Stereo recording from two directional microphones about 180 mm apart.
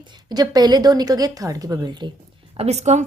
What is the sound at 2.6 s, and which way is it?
Speech, 35° right (ahead or behind).